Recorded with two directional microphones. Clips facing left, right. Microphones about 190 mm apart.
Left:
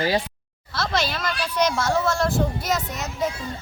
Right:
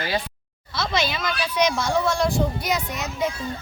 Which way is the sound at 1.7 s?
5° left (ahead or behind).